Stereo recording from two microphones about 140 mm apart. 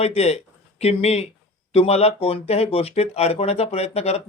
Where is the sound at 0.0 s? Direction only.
50° left (ahead or behind).